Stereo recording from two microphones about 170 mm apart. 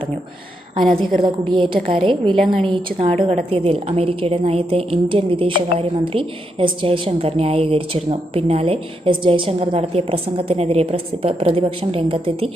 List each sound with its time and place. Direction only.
1.2 s a woman's voice: 30° right (ahead or behind)